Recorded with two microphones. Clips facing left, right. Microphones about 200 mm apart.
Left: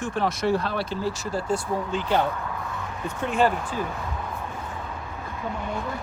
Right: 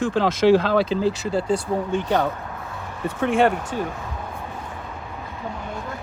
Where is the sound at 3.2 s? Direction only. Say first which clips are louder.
Right 4 dB; 60° right (ahead or behind).